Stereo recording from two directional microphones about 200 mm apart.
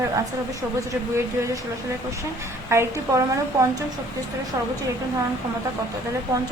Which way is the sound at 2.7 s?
15° right (ahead or behind).